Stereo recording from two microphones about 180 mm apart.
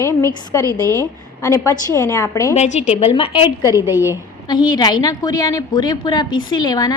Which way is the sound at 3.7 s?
15° right (ahead or behind).